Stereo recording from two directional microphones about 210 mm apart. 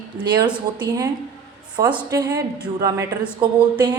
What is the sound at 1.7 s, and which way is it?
A woman's voice, 20° right (ahead or behind).